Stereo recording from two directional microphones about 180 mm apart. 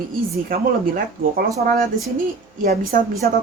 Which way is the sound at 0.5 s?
55° right (ahead or behind).